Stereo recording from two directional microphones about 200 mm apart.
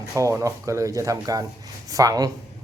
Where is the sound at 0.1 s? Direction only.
15° right (ahead or behind).